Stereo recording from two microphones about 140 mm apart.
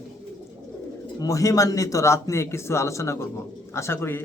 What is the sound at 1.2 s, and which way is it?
Speech, 25° left (ahead or behind).